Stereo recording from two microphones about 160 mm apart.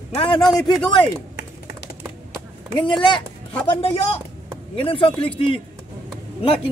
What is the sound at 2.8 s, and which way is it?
Speech, 30° left (ahead or behind).